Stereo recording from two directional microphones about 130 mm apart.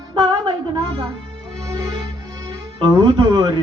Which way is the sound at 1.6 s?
25° right (ahead or behind).